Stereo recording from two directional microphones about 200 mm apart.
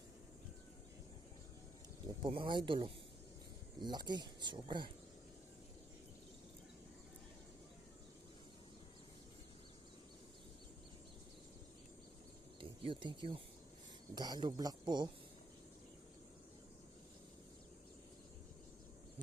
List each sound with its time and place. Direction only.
2.2 s speech: 25° right (ahead or behind)
12.5 s speech: 25° right (ahead or behind)